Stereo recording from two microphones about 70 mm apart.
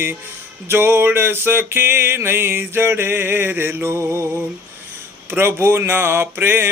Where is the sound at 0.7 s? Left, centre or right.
Right.